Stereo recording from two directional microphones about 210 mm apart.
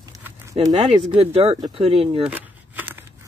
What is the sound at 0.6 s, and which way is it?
Speech, 20° right (ahead or behind).